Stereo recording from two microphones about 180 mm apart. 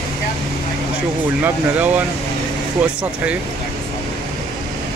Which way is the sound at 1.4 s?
10° right (ahead or behind).